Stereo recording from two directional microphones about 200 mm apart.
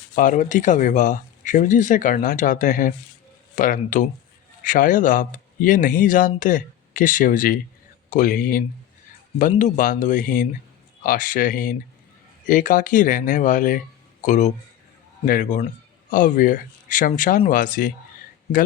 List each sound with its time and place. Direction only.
0.2 s speech: 40° left (ahead or behind)